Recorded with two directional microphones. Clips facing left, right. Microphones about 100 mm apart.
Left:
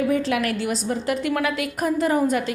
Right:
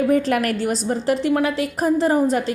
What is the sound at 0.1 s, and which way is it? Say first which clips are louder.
A woman's voice: right 3 dB; 45° right (ahead or behind).